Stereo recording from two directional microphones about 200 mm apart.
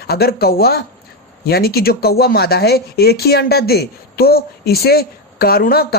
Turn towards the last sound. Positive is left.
turn(degrees=50)  # may be behind; listen again after turning